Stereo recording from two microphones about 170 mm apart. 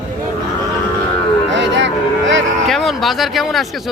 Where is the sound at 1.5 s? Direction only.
90° right.